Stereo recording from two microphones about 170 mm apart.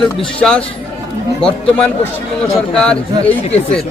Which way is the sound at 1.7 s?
10° left (ahead or behind).